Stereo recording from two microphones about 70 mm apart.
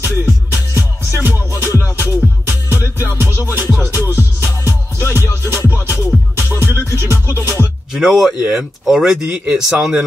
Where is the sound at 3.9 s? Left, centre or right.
Left.